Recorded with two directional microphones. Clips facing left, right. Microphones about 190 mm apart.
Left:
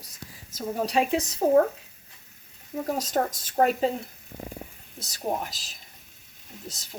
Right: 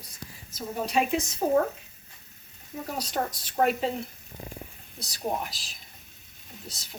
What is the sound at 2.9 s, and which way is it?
Speech, 45° left (ahead or behind).